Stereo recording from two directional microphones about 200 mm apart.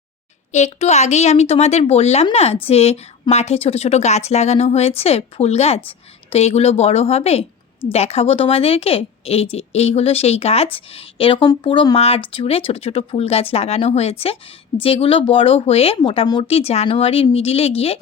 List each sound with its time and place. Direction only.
0.5 s a woman's voice: 35° left (ahead or behind)